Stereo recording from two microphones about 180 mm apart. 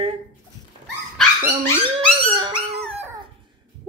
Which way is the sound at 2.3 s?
25° right (ahead or behind).